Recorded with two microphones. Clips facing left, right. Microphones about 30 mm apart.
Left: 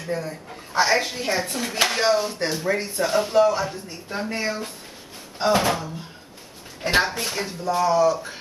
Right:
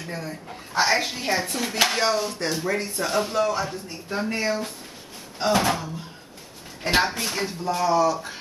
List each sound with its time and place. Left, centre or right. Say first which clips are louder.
0.0 s speech: left 4 dB; centre